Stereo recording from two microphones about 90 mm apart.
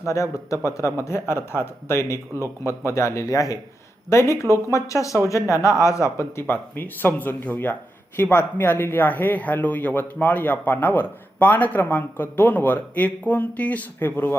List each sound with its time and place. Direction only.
0.0 s speech: 35° left (ahead or behind)